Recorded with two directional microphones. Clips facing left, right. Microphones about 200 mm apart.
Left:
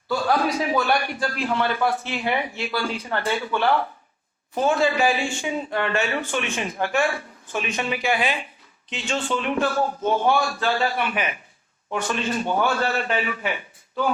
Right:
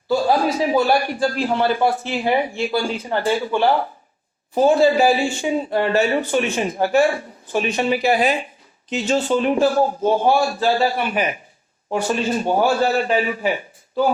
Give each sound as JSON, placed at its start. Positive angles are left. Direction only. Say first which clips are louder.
{"t": 0.2, "sound": "speech", "louder": "right 1 dB", "side_deg": -35}